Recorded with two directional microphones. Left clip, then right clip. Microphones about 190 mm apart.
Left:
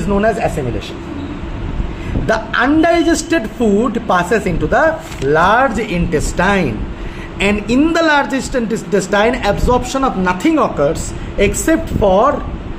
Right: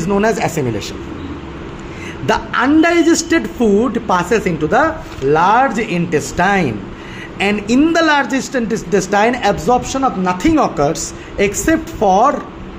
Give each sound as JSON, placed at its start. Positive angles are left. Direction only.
{"t": 0.2, "sound": "speech", "side_deg": -30}
{"t": 2.2, "sound": "a man's voice", "side_deg": -15}